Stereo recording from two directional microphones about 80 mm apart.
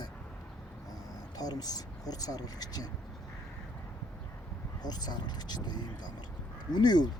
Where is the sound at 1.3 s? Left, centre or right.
Left.